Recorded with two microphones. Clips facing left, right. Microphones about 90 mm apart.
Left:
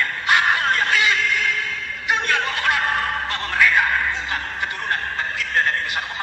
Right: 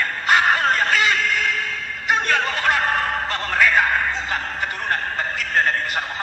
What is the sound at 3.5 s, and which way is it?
Music, 40° right (ahead or behind).